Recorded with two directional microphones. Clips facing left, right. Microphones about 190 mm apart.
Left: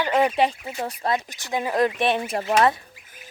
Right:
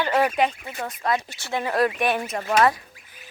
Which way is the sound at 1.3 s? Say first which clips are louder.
Left 1 dB; 15° left (ahead or behind).